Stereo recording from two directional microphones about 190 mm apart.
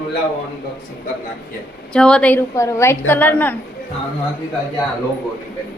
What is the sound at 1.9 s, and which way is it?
A woman's voice, 5° left (ahead or behind).